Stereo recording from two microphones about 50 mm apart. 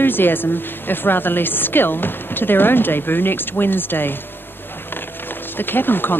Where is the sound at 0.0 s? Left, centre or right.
Left.